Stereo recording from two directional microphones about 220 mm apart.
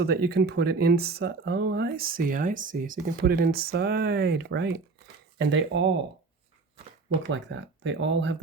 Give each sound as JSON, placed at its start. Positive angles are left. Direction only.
{"t": 0.0, "sound": "speech", "side_deg": -45}
{"t": 7.3, "sound": "speech", "side_deg": -55}